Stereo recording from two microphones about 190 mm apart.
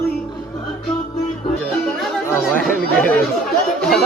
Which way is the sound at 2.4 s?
5° left (ahead or behind).